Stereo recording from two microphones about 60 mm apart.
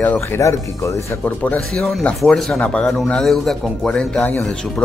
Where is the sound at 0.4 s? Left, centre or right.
Left.